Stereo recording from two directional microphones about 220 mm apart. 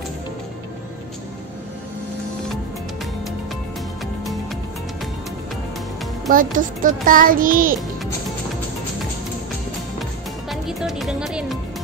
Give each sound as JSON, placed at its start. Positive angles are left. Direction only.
{"t": 6.3, "sound": "music", "side_deg": -40}
{"t": 10.5, "sound": "music", "side_deg": 0}